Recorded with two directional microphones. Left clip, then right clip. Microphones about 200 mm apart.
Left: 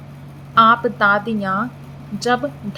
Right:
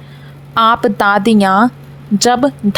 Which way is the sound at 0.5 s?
60° right (ahead or behind).